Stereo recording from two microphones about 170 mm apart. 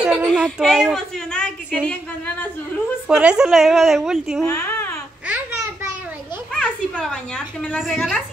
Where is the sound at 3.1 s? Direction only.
5° right (ahead or behind).